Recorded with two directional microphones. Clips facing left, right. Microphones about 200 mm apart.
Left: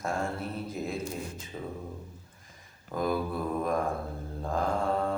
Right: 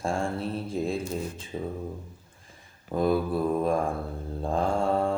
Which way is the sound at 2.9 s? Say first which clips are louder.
Right 5 dB; 30° right (ahead or behind).